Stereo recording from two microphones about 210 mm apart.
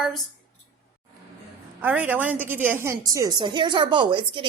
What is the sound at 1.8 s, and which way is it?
A woman's voice, 5° right (ahead or behind).